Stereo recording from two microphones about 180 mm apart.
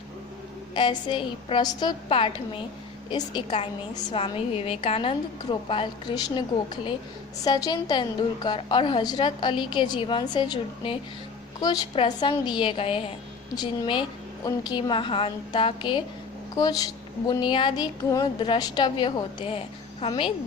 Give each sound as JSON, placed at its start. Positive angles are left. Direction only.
{"t": 0.7, "sound": "a woman's voice", "side_deg": 25}